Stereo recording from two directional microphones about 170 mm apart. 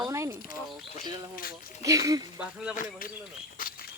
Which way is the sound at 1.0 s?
55° left (ahead or behind).